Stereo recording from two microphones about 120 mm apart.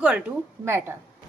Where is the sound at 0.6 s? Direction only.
20° right (ahead or behind).